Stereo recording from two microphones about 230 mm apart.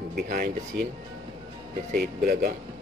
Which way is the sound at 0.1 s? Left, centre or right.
Right.